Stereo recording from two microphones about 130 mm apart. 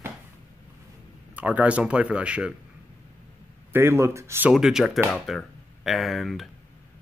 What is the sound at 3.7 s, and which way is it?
Speech, 20° right (ahead or behind).